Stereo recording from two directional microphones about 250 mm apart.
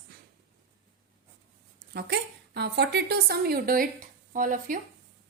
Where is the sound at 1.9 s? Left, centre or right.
Right.